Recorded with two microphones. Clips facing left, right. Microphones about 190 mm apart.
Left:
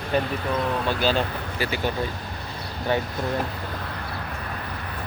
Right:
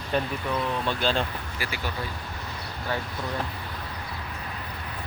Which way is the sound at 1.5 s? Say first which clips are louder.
Left 8 dB; 25° left (ahead or behind).